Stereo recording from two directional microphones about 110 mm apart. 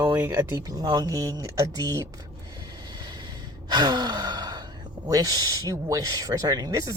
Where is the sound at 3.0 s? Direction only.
40° right (ahead or behind).